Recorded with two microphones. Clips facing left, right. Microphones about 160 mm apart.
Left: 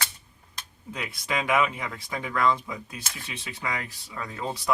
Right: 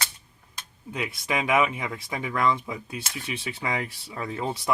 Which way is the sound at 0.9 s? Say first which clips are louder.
Right 2 dB; 20° right (ahead or behind).